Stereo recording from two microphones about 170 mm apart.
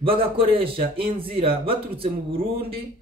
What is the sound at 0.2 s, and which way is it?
Speech, 35° right (ahead or behind).